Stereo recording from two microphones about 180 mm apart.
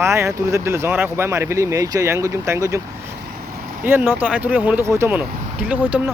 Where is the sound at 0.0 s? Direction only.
15° right (ahead or behind).